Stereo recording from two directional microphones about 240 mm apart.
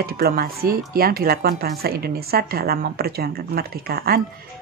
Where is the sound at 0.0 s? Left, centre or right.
Right.